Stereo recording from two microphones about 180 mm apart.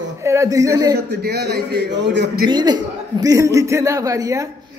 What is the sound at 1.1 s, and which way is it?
A man's voice, 65° right (ahead or behind).